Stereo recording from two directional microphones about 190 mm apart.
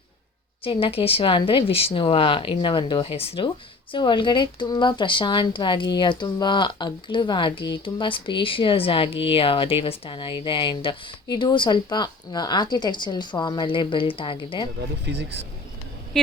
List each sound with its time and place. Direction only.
0.6 s speech: 30° left (ahead or behind)
15.1 s speech: 65° right (ahead or behind)
16.1 s speech: centre (ahead or behind)